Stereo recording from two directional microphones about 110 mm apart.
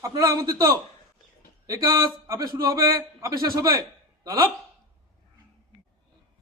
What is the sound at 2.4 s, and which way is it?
A man's voice, 35° right (ahead or behind).